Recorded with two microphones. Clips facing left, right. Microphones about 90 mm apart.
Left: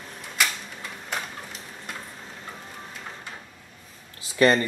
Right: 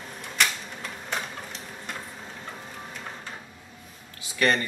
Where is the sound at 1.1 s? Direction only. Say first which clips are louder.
Even; centre (ahead or behind).